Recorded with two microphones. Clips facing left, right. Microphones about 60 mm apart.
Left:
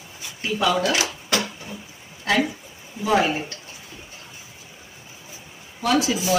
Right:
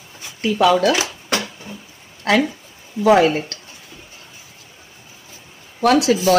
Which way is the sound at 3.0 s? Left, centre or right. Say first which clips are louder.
Right 7 dB; right.